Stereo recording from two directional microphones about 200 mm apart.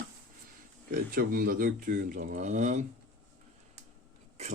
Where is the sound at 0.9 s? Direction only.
45° right (ahead or behind).